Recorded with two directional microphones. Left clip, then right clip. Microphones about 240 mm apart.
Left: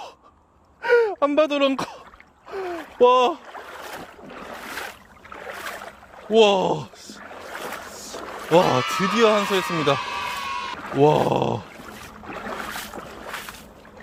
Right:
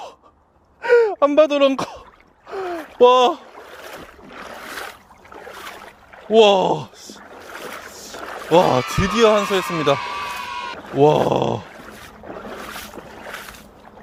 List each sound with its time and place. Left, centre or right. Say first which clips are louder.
0.8 s speech: right 4 dB; centre
2.5 s a sound: right 3 dB; centre
6.3 s speech: right 4 dB; centre